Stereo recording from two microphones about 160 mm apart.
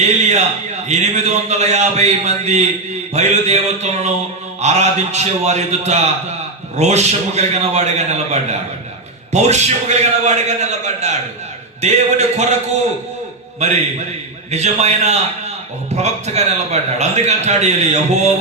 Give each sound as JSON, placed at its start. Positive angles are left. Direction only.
{"t": 0.0, "sound": "a man's voice", "side_deg": -45}
{"t": 13.6, "sound": "a man's voice", "side_deg": -45}